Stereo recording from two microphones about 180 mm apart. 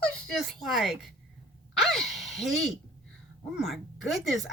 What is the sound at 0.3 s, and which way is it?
Speech, centre (ahead or behind).